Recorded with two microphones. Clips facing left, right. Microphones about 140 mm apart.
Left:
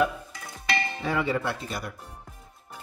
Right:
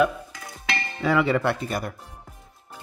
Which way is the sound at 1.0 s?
85° right.